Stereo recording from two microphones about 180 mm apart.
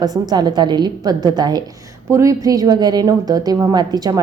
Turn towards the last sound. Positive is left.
turn(degrees=-20)  # may be behind; listen again after turning